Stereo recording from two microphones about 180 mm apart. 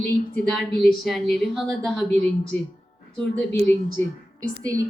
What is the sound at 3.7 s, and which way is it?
Speech, 10° left (ahead or behind).